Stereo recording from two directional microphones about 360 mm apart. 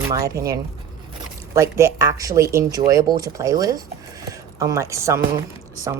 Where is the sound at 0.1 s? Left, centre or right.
Centre.